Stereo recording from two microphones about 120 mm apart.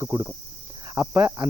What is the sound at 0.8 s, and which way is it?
Cricket, 25° right (ahead or behind).